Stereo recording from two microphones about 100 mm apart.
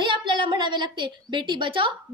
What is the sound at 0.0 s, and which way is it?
A woman's voice, 55° right (ahead or behind).